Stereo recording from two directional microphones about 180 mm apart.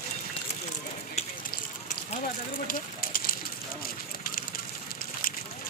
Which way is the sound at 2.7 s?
50° left (ahead or behind).